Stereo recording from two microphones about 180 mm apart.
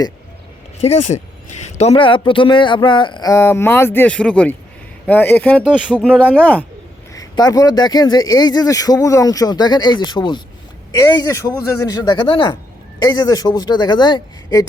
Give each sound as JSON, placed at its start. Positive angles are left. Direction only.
{"t": 1.8, "sound": "a man's voice", "side_deg": 30}
{"t": 7.1, "sound": "a man's voice", "side_deg": 20}